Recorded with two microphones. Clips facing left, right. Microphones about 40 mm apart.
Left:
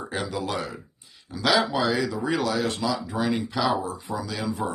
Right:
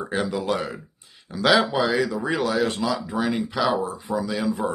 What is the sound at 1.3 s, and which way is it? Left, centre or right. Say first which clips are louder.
Speech: right 3 dB; right.